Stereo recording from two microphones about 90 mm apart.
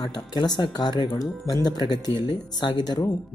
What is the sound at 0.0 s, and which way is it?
Speech, 50° left (ahead or behind).